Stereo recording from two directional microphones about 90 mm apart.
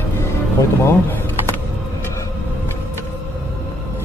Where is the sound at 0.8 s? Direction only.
25° left (ahead or behind).